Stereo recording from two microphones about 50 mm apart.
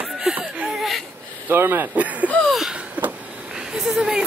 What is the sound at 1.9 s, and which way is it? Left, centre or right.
Speech, right.